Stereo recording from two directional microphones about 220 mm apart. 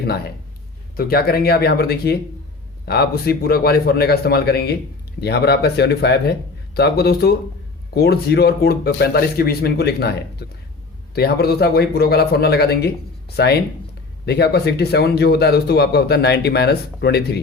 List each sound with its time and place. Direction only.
0.9 s speech: 45° left (ahead or behind)